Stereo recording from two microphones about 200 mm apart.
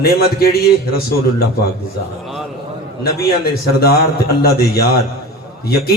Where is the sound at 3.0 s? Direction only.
50° left (ahead or behind).